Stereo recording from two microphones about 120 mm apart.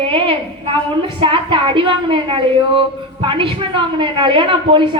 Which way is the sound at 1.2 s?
45° right (ahead or behind).